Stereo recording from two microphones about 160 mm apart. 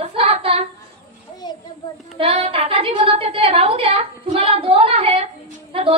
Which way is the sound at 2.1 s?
35° right (ahead or behind).